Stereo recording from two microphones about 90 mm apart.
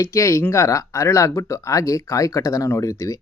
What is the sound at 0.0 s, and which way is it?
Speech, 35° left (ahead or behind).